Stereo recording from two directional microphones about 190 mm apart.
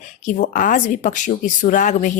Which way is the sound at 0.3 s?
45° left (ahead or behind).